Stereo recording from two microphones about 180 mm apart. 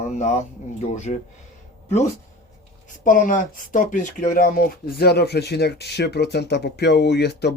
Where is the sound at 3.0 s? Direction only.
45° left (ahead or behind); by 7.5 s 65° left (ahead or behind).